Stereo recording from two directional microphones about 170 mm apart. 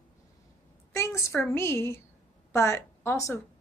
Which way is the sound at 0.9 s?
15° left (ahead or behind).